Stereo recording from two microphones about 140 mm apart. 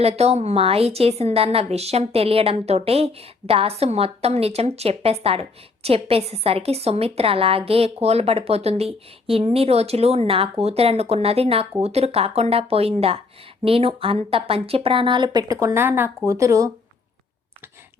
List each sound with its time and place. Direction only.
0.0 s a woman's voice: 50° right (ahead or behind); by 15.5 s 30° right (ahead or behind)
15.5 s speech: 15° right (ahead or behind)